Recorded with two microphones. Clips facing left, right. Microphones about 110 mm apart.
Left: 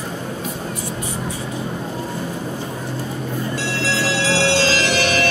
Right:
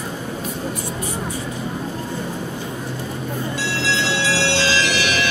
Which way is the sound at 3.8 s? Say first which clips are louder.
Left 1 dB; 45° left (ahead or behind).